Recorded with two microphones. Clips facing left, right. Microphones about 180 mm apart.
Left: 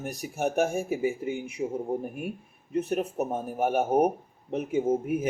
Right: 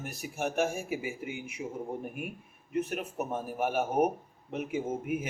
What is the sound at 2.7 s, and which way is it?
Speech, 35° left (ahead or behind).